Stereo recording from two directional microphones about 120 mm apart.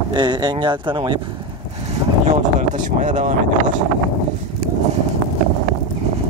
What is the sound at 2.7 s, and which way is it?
Speech, 90° right.